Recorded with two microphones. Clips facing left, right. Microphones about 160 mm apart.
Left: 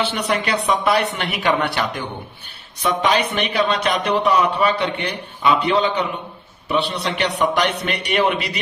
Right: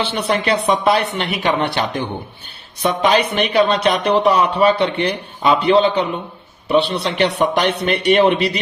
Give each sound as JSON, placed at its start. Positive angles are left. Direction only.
{"t": 0.0, "sound": "speech", "side_deg": -30}